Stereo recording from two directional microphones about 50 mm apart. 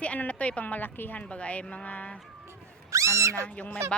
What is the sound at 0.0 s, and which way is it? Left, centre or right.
A woman's voice, left.